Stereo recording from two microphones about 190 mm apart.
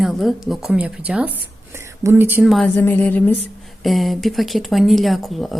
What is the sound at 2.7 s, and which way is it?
A woman's voice, 10° left (ahead or behind).